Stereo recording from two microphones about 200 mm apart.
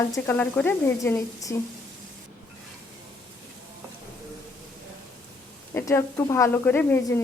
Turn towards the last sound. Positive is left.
turn(degrees=10)  # may be behind; listen again after turning